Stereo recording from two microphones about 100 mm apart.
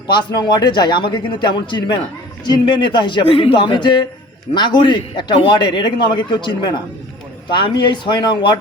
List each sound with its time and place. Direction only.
0.1 s a man's voice: 50° left (ahead or behind)